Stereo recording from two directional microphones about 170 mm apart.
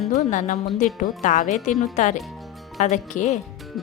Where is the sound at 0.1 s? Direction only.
45° left (ahead or behind).